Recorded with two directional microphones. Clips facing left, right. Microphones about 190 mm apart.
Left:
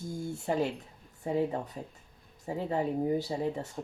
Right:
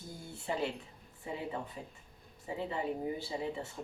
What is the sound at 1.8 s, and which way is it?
Speech, 45° left (ahead or behind).